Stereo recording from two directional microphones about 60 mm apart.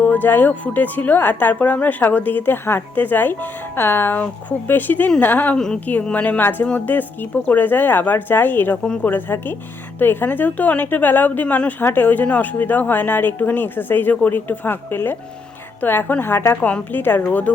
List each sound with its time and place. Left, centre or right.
0.0 s a woman's voice: left
5.5 s a woman's voice: centre
6.1 s a woman's voice: left
6.4 s a woman's voice: left